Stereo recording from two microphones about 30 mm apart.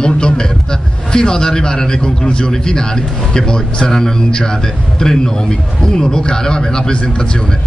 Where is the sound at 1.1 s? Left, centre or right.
Left.